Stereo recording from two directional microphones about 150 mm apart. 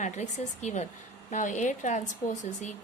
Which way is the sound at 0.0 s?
50° left (ahead or behind).